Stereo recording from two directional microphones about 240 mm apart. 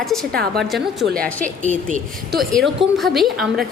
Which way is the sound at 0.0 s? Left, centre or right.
Centre.